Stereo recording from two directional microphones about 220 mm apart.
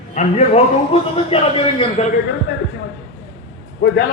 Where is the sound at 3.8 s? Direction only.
50° left (ahead or behind).